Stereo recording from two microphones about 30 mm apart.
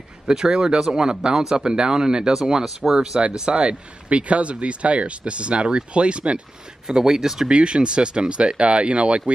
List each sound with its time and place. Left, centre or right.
0.3 s speech: right
2.6 s speech: centre
3.5 s speech: right
6.9 s speech: centre
7.4 s speech: right